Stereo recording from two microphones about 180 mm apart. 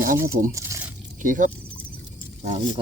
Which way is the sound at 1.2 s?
45° right (ahead or behind).